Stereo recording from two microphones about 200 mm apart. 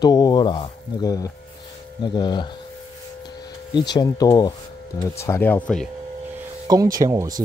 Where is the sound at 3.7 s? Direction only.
20° left (ahead or behind); by 5.9 s 5° left (ahead or behind).